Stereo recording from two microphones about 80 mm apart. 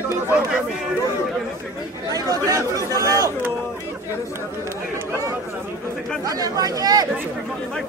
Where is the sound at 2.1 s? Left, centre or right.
Right.